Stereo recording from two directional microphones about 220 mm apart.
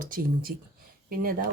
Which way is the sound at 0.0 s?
40° right (ahead or behind).